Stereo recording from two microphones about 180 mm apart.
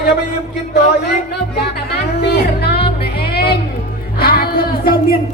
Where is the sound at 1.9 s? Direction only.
65° left (ahead or behind).